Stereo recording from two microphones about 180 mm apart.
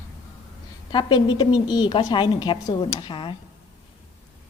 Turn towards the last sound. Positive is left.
turn(degrees=25)  # may be behind; listen again after turning